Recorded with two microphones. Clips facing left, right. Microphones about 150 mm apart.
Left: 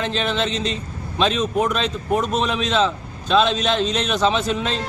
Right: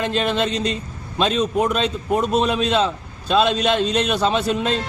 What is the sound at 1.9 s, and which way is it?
A man's voice, 10° right (ahead or behind).